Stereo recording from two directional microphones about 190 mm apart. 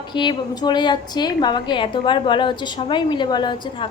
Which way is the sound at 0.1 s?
25° left (ahead or behind).